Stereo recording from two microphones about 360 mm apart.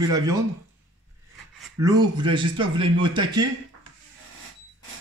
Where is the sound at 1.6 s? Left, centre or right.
Centre.